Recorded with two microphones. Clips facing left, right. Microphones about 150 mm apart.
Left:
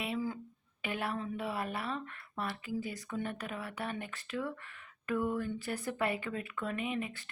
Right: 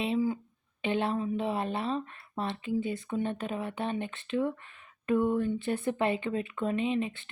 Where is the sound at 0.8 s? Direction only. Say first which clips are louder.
Right 7 dB; 25° right (ahead or behind).